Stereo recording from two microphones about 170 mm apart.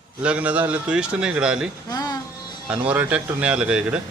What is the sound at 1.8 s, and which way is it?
Speech, 20° left (ahead or behind).